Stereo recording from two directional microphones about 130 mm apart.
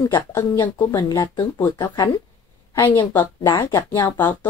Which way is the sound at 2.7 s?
20° left (ahead or behind).